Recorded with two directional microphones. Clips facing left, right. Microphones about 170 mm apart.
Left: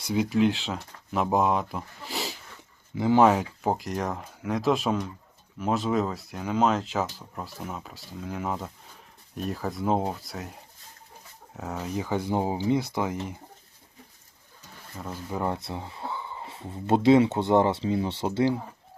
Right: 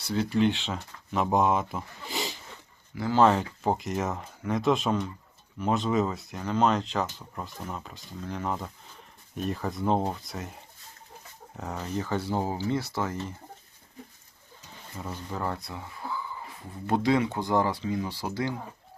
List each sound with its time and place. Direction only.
0.1 s speech: 10° left (ahead or behind)
2.9 s speech: 20° left (ahead or behind)
14.9 s speech: centre (ahead or behind)
15.3 s speech: 20° left (ahead or behind)